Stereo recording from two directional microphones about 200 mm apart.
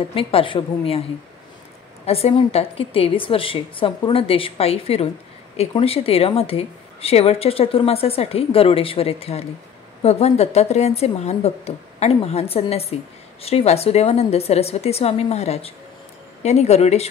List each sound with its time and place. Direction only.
0.1 s a woman's voice: 25° left (ahead or behind)
2.0 s a woman's voice: 30° left (ahead or behind)